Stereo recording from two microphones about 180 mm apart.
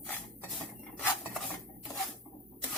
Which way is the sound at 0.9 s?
5° left (ahead or behind).